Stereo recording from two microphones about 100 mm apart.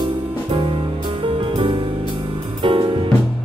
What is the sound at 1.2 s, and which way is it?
Music, 60° right (ahead or behind).